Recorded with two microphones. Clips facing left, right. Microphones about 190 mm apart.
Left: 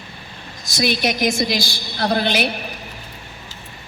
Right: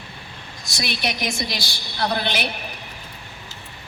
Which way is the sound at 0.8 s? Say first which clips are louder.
Left 7 dB; 45° left (ahead or behind).